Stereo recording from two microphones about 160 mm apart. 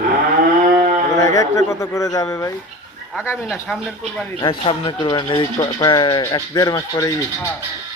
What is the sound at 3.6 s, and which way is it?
Speech, centre (ahead or behind).